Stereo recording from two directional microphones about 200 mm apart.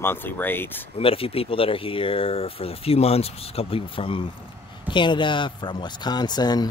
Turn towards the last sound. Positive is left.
turn(degrees=20)  # may be behind; listen again after turning